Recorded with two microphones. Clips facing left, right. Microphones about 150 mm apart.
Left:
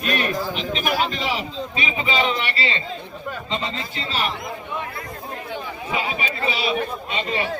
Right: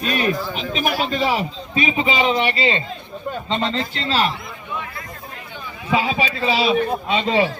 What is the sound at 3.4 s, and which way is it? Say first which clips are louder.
Speech: right 7 dB; 70° right (ahead or behind).